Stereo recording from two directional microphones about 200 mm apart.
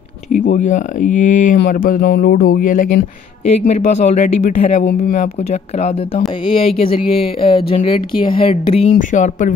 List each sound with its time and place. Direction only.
0.3 s speech: 35° left (ahead or behind)
8.9 s speech: 40° left (ahead or behind)